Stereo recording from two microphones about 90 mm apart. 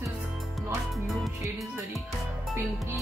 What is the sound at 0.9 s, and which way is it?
Music, centre (ahead or behind).